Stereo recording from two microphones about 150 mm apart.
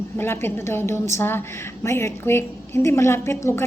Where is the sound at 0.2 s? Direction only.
15° left (ahead or behind).